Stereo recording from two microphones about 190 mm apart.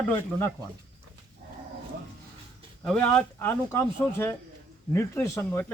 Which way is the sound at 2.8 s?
5° left (ahead or behind).